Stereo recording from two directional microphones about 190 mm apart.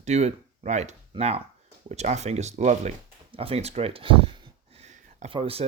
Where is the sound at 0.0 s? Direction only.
35° right (ahead or behind).